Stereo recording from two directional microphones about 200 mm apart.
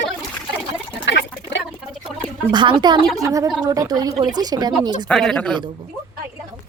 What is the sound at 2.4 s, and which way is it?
Speech, 25° right (ahead or behind).